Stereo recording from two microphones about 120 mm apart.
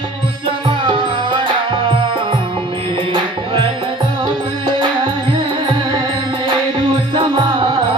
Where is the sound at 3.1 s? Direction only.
45° right (ahead or behind).